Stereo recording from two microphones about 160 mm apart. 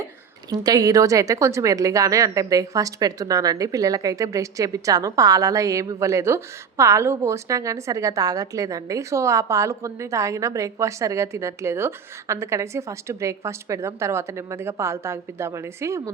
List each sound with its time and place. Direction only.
0.5 s a woman's voice: 25° right (ahead or behind)